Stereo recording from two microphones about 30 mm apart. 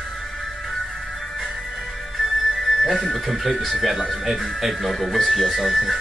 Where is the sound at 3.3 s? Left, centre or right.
Centre.